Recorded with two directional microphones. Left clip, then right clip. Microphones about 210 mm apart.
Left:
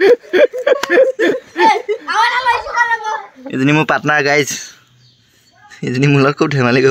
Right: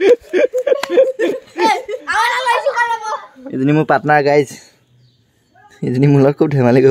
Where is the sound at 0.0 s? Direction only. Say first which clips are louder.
Left 2 dB; 25° left (ahead or behind).